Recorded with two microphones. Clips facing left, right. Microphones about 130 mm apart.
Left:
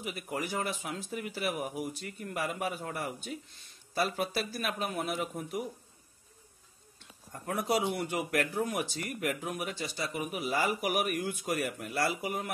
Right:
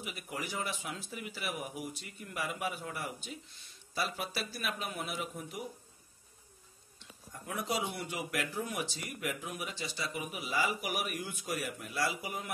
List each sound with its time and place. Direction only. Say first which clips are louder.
0.0 s speech: left 5 dB; 45° left (ahead or behind)
7.4 s speech: left 6 dB; 50° left (ahead or behind)